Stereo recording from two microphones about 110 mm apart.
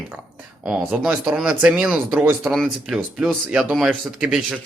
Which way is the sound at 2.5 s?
Centre (ahead or behind).